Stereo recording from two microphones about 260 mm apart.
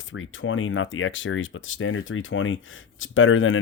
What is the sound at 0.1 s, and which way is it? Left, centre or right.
Speech, left.